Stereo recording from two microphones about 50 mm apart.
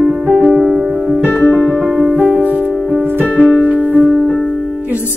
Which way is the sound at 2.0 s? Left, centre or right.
Right.